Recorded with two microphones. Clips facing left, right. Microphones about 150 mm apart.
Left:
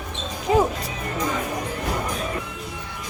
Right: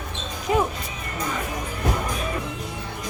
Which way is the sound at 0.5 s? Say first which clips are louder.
Left 3 dB; 25° left (ahead or behind).